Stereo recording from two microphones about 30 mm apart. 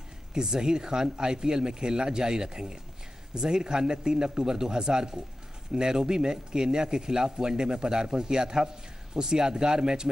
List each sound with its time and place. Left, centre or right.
0.3 s speech: right